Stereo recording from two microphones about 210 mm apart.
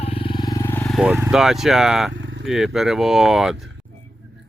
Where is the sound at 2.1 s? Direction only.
60° right (ahead or behind).